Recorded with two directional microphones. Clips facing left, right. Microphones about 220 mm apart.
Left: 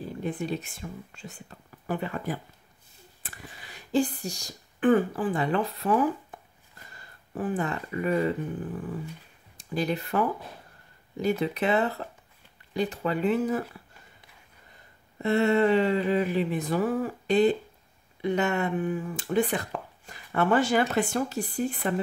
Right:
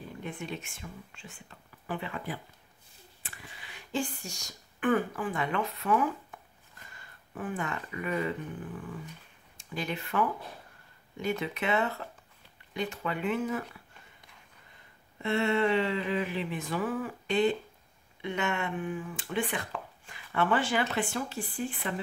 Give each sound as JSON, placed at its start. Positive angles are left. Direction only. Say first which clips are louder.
{"t": 0.0, "sound": "speech", "louder": "left 8 dB", "side_deg": 35}
{"t": 15.1, "sound": "speech", "louder": "left 5 dB", "side_deg": 40}